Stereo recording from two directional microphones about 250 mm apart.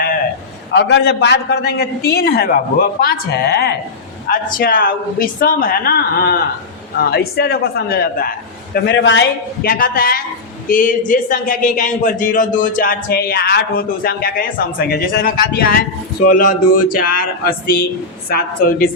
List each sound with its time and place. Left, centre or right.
0.7 s a man's voice: left